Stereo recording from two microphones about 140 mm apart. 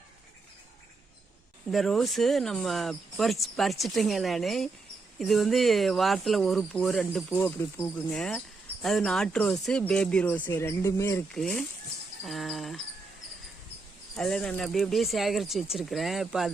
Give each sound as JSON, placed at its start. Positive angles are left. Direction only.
{"t": 1.7, "sound": "speech", "side_deg": 0}
{"t": 7.3, "sound": "speech", "side_deg": 15}
{"t": 8.1, "sound": "speech", "side_deg": 5}
{"t": 11.3, "sound": "speech", "side_deg": 5}
{"t": 14.2, "sound": "speech", "side_deg": 5}